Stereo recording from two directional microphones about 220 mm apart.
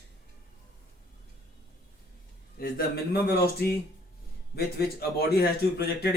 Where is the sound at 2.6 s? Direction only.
45° left (ahead or behind).